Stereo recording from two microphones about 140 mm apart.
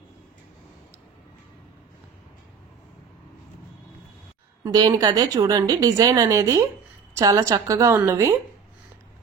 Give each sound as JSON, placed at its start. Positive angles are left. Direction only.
{"t": 4.6, "sound": "a woman's voice", "side_deg": -30}